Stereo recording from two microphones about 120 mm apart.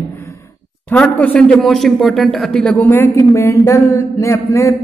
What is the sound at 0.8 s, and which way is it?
A man's voice, 10° left (ahead or behind).